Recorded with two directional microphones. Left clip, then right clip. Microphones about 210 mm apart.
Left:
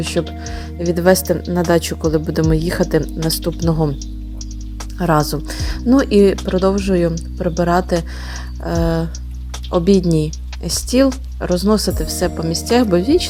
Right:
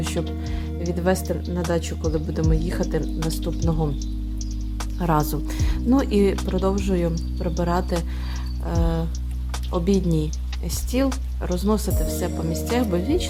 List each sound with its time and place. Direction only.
0.4 s speech: 25° left (ahead or behind)
4.9 s speech: 20° left (ahead or behind)